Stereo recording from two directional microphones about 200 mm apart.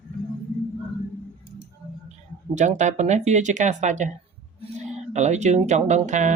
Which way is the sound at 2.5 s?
35° right (ahead or behind).